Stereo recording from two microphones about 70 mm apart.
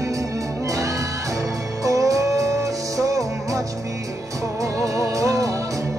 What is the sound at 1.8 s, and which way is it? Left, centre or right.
Music, right.